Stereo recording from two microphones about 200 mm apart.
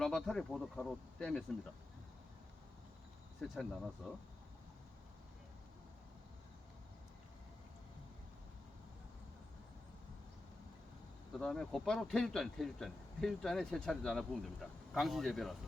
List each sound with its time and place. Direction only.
0.0 s speech: centre (ahead or behind)
3.5 s speech: centre (ahead or behind)
11.3 s speech: 5° left (ahead or behind)